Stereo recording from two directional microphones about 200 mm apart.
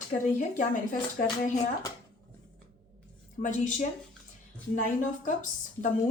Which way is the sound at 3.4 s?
40° left (ahead or behind).